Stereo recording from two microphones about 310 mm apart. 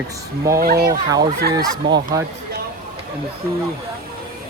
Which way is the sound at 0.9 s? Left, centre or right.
Centre.